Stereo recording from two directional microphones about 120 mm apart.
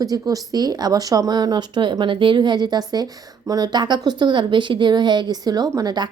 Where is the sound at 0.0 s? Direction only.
30° right (ahead or behind).